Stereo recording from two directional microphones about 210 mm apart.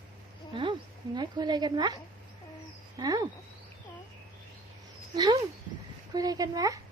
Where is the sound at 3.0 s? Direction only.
20° right (ahead or behind).